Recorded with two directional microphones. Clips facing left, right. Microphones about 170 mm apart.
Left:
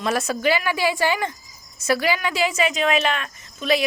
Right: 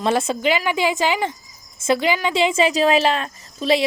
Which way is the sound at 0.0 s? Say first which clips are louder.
Right 2 dB; 25° right (ahead or behind).